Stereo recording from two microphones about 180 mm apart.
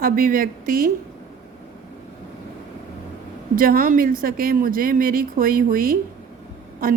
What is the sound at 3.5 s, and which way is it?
Speech, 50° right (ahead or behind).